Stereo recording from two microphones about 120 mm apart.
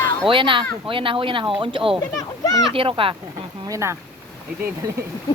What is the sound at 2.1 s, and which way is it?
Speech, 30° left (ahead or behind).